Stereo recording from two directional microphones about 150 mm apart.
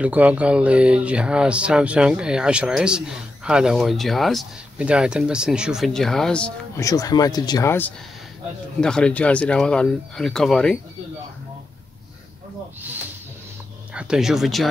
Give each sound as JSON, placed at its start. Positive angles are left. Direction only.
{"t": 0.0, "sound": "speech", "side_deg": -10}
{"t": 6.8, "sound": "speech", "side_deg": 25}
{"t": 8.8, "sound": "speech", "side_deg": 5}
{"t": 13.9, "sound": "speech", "side_deg": -5}